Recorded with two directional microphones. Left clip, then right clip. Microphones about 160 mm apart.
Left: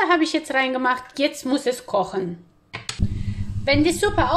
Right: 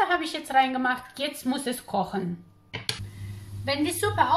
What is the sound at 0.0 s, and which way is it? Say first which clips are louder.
A woman's voice: left 6 dB; 50° left (ahead or behind).